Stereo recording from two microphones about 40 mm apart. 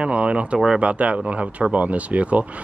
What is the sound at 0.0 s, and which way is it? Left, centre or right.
Speech, right.